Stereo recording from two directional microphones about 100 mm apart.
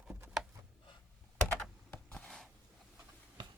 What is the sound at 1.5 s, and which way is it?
Computer keyboard, 15° left (ahead or behind).